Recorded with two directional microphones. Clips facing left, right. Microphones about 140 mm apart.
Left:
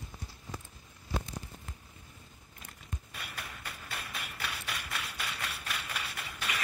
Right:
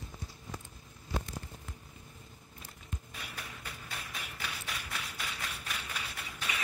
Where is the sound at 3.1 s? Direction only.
70° left (ahead or behind).